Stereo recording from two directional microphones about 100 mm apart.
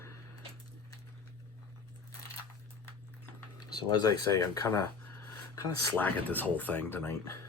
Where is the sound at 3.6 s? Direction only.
40° left (ahead or behind).